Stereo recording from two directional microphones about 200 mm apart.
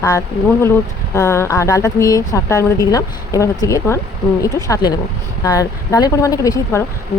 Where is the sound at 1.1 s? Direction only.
15° left (ahead or behind).